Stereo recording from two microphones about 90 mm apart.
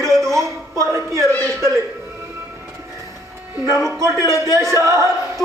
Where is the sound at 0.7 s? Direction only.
35° right (ahead or behind).